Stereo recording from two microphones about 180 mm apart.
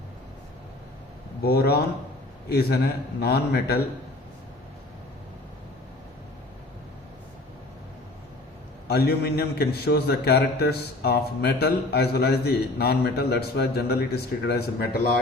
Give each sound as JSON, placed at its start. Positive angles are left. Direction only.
{"t": 1.5, "sound": "a man's voice", "side_deg": 60}
{"t": 8.9, "sound": "a man's voice", "side_deg": 60}